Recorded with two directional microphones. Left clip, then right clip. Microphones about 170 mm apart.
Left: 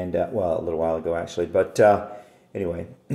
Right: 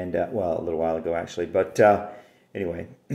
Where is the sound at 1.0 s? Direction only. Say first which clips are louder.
Left 1 dB; 30° right (ahead or behind).